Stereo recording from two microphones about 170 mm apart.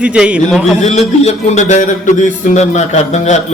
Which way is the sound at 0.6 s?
40° left (ahead or behind).